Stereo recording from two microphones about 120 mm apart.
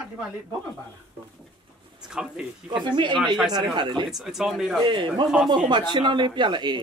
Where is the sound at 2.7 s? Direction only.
40° right (ahead or behind).